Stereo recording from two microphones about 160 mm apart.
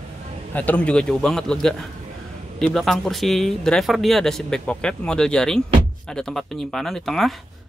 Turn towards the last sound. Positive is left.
turn(degrees=0)  # may be behind; listen again after turning